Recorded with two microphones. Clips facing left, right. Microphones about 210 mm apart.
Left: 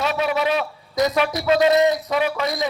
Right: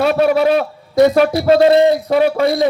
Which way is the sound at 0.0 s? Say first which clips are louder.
Right 9 dB; 50° right (ahead or behind).